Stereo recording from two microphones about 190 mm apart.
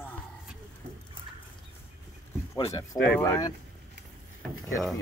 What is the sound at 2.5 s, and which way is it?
Speech, 15° left (ahead or behind).